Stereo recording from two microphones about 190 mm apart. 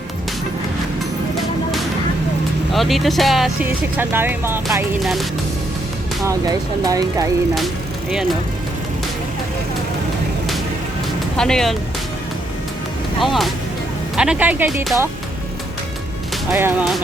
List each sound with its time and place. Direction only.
2.7 s speech: centre (ahead or behind)
6.2 s speech: 20° right (ahead or behind)
11.3 s speech: 5° left (ahead or behind)
13.2 s speech: centre (ahead or behind)
16.5 s speech: 5° right (ahead or behind)